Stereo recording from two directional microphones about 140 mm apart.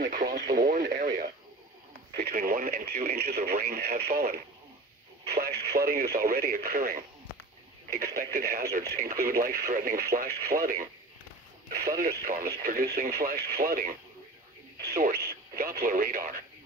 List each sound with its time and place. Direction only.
0.0 s speech: 90° right
5.4 s speech: 90° right
15.0 s speech: 90° right